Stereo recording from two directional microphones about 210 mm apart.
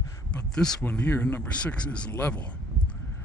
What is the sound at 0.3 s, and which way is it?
Speech, 5° left (ahead or behind).